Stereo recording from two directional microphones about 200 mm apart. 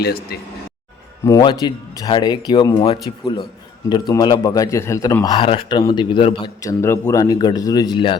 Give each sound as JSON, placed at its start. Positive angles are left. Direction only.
{"t": 0.0, "sound": "speech", "side_deg": 50}
{"t": 1.2, "sound": "a man's voice", "side_deg": 20}